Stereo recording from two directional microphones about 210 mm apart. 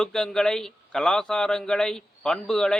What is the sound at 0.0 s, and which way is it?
A man's voice, centre (ahead or behind).